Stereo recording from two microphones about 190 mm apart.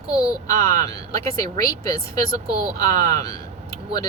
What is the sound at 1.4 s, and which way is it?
Speech, 15° left (ahead or behind).